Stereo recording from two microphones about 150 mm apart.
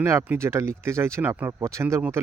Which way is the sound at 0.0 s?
15° right (ahead or behind).